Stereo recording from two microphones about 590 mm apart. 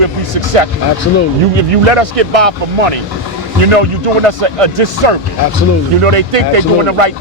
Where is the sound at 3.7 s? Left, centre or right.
Right.